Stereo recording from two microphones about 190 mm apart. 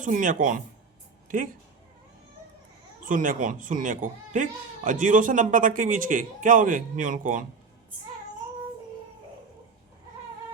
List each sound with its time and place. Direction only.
0.0 s speech: 45° right (ahead or behind)
3.0 s speech: 45° right (ahead or behind)